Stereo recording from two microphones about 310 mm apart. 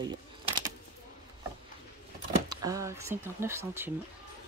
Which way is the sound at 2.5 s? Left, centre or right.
Centre.